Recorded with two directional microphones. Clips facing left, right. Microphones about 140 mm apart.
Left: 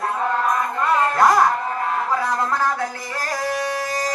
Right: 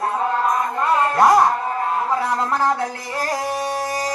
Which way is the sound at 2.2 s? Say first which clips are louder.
Right 1 dB; 25° right (ahead or behind).